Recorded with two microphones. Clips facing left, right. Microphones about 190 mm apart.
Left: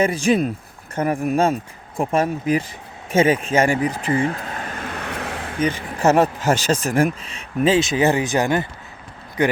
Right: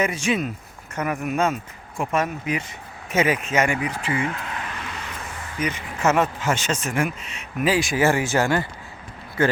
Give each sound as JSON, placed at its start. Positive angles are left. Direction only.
{"t": 0.0, "sound": "speech", "side_deg": 35}
{"t": 3.1, "sound": "vehicle", "side_deg": 30}
{"t": 5.5, "sound": "speech", "side_deg": 30}